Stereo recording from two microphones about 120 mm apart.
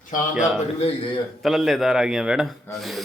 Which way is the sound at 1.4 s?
Centre (ahead or behind).